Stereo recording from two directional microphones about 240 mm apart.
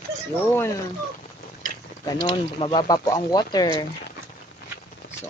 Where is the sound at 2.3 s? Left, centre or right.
Left.